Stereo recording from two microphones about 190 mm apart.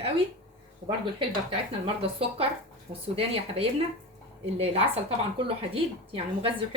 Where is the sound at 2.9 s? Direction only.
30° right (ahead or behind).